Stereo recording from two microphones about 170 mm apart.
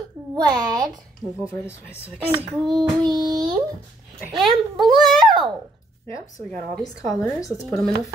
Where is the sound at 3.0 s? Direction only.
25° right (ahead or behind).